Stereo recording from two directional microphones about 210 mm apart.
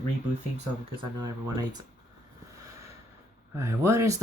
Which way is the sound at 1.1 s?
20° right (ahead or behind).